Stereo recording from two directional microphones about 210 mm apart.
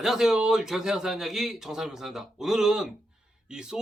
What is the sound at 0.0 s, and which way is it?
Speech, centre (ahead or behind).